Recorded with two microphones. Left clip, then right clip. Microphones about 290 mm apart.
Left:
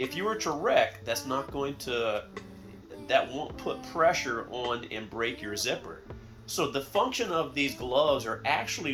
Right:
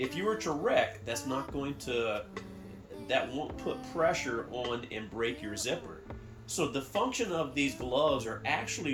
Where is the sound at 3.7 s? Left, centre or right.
Left.